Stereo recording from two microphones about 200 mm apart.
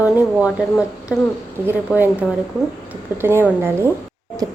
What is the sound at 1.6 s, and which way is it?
Speech, 10° right (ahead or behind).